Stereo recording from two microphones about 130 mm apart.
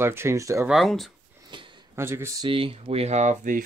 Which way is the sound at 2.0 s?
20° right (ahead or behind).